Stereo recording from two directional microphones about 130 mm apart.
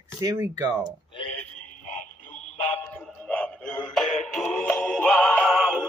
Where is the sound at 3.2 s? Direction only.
10° left (ahead or behind).